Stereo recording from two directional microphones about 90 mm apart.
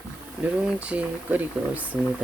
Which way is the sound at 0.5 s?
15° right (ahead or behind).